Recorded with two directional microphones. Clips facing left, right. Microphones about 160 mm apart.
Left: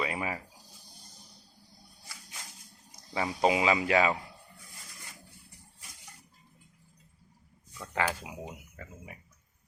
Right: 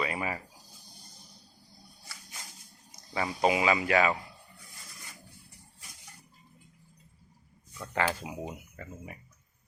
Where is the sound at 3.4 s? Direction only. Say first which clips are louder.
Even; 25° left (ahead or behind).